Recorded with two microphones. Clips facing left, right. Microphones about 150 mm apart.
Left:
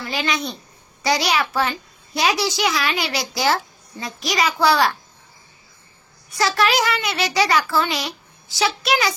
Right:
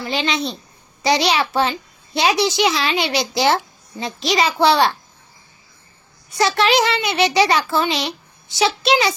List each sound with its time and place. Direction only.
0.0 s a child's voice: 25° right (ahead or behind)
6.3 s a child's voice: 25° right (ahead or behind)